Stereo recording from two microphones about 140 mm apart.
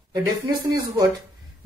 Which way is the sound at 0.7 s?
25° right (ahead or behind).